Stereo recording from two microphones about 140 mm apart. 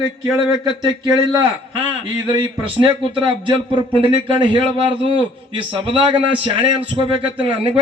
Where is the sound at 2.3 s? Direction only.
35° right (ahead or behind).